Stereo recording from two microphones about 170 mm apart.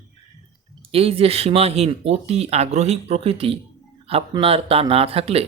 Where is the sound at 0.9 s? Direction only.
35° right (ahead or behind).